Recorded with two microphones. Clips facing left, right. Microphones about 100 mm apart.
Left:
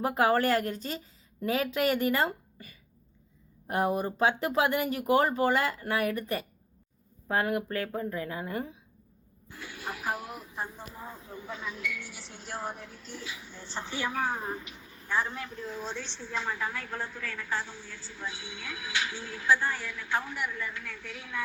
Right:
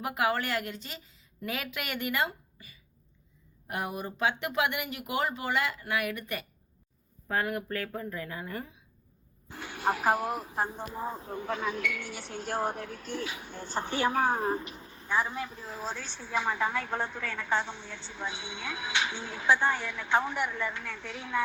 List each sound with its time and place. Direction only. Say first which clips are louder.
0.0 s a woman's voice: left 4 dB; 35° left (ahead or behind)
3.7 s a woman's voice: left 7 dB; 35° left (ahead or behind)
9.7 s speech: right 8 dB; 55° right (ahead or behind)
11.0 s speech: right 9 dB; 35° right (ahead or behind)
11.3 s speech: right 5 dB; 60° right (ahead or behind); by 15.0 s 35° right (ahead or behind)
15.0 s a woman's voice: right 1 dB; 15° right (ahead or behind)